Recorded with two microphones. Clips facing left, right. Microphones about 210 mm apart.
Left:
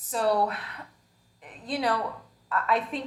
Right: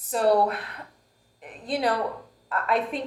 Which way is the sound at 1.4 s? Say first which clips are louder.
Right 3 dB; 50° right (ahead or behind).